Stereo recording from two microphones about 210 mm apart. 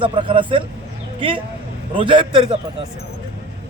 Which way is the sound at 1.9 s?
25° right (ahead or behind).